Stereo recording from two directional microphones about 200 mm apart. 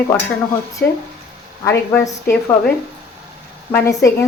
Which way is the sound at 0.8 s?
55° left (ahead or behind).